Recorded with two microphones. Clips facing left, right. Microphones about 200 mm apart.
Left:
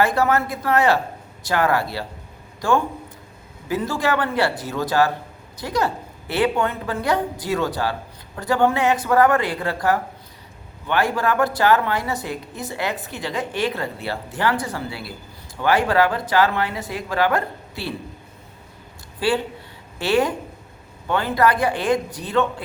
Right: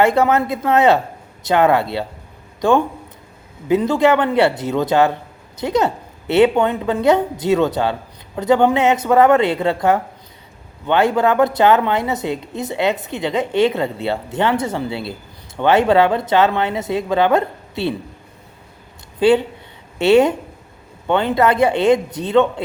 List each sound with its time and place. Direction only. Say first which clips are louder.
0.0 s a woman's voice: right 4 dB; 25° right (ahead or behind)
19.2 s a woman's voice: right 8 dB; 20° right (ahead or behind)